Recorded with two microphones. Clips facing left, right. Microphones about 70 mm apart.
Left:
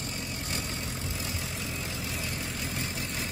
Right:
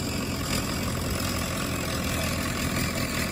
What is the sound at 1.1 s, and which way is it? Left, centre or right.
Vehicle, right.